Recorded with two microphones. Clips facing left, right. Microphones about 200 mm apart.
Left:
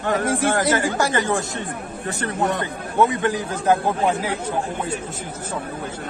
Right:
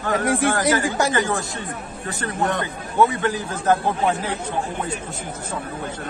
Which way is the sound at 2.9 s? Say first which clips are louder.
Even; 15° left (ahead or behind).